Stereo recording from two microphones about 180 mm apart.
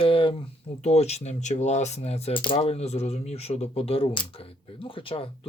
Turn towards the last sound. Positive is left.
turn(degrees=30)  # may be behind; listen again after turning